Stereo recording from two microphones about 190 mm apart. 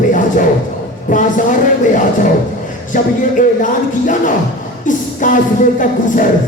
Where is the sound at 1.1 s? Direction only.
45° left (ahead or behind).